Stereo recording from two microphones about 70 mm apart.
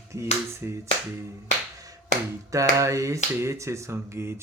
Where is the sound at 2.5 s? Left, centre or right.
Right.